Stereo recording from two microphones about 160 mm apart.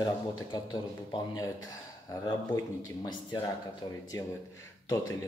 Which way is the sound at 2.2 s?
25° left (ahead or behind).